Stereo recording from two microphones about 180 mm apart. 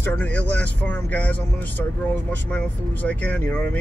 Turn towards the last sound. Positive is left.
turn(degrees=10)  # may be behind; listen again after turning